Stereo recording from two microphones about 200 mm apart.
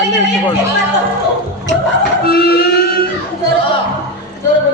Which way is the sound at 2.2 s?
50° left (ahead or behind).